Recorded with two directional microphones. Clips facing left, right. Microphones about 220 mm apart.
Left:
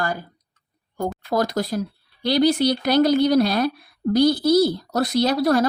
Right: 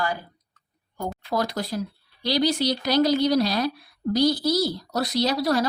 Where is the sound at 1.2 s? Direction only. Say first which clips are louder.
Left 4 dB; 45° left (ahead or behind).